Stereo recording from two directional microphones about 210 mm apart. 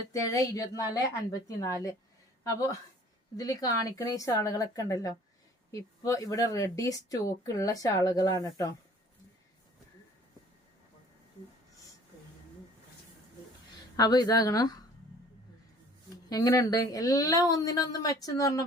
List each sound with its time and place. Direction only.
0.1 s speech: 15° left (ahead or behind)
13.9 s speech: 20° left (ahead or behind)
16.3 s speech: 15° left (ahead or behind)